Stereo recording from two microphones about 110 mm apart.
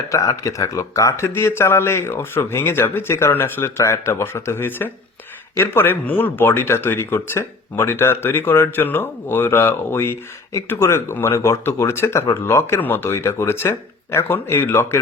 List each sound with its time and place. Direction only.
0.1 s speech: 30° left (ahead or behind)